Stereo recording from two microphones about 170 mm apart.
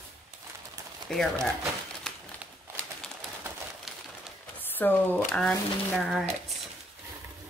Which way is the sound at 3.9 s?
Centre (ahead or behind).